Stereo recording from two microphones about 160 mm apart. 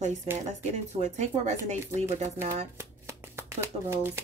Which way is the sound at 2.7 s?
15° right (ahead or behind).